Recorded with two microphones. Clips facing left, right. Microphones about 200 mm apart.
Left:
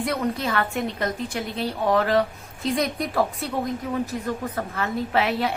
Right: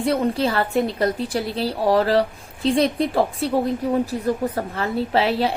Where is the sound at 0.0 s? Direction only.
30° right (ahead or behind).